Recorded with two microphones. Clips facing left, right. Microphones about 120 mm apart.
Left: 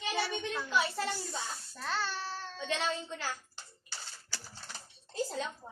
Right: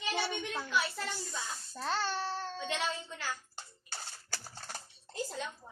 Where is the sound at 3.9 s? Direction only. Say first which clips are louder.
Right 2 dB; 50° right (ahead or behind).